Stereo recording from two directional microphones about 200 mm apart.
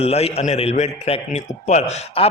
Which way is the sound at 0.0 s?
30° left (ahead or behind).